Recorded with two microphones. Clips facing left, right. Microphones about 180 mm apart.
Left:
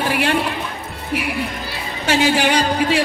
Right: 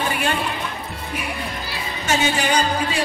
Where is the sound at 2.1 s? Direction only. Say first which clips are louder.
Left 4 dB; 75° left (ahead or behind).